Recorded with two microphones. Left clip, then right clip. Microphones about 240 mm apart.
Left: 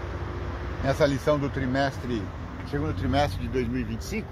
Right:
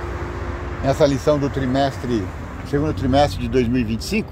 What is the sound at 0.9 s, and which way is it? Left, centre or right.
Speech, right.